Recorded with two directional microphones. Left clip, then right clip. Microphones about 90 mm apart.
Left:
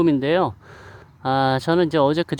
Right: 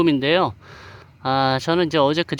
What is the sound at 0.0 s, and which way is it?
Speech, 20° left (ahead or behind).